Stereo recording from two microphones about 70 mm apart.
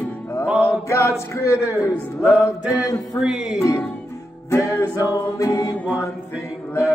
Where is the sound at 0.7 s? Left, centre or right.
Left.